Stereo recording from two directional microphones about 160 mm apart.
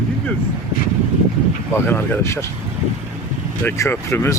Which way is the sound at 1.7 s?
15° left (ahead or behind).